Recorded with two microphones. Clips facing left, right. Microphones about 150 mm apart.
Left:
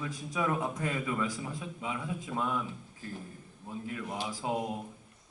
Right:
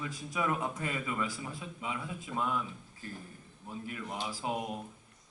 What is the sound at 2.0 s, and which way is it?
Speech, 10° left (ahead or behind).